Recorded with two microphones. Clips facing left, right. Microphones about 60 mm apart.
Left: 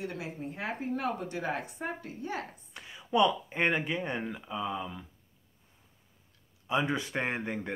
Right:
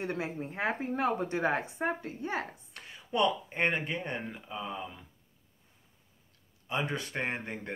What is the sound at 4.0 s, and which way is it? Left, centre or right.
Speech, centre.